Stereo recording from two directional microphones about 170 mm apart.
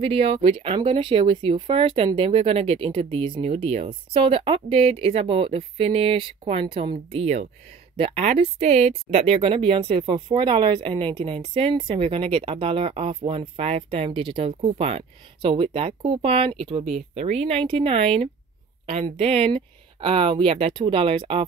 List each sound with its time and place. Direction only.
0.0 s speech: 35° right (ahead or behind)